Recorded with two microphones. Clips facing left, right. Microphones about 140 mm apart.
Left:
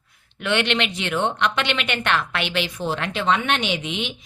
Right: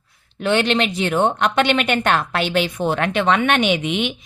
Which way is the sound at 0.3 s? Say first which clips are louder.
Right 4 dB; 35° right (ahead or behind).